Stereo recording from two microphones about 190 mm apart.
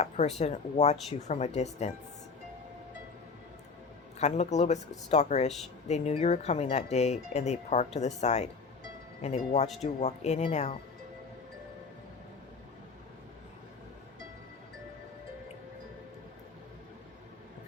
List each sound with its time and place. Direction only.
0.0 s speech: 35° left (ahead or behind)
4.2 s speech: 35° left (ahead or behind)